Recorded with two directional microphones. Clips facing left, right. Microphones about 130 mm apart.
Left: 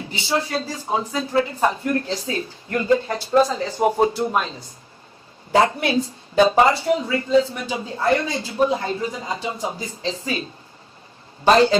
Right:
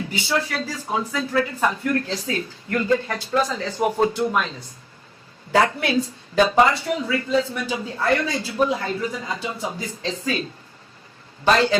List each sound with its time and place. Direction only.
0.0 s a man's voice: 25° left (ahead or behind)
11.4 s a man's voice: 25° left (ahead or behind)